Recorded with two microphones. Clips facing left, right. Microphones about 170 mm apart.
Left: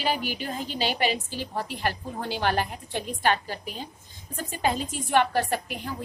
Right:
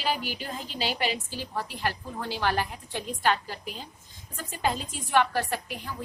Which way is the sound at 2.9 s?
55° left (ahead or behind).